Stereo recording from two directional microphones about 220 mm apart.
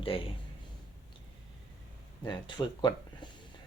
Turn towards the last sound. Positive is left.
turn(degrees=20)  # may be behind; listen again after turning